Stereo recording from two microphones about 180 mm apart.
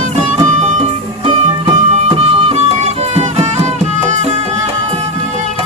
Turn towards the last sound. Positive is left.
turn(degrees=-40)  # may be behind; listen again after turning